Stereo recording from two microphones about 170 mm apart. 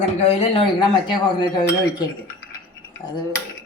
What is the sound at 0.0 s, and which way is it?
Speech, 40° left (ahead or behind).